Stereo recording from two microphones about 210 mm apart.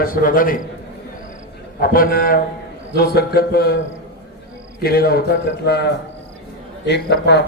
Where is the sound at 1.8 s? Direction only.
45° left (ahead or behind).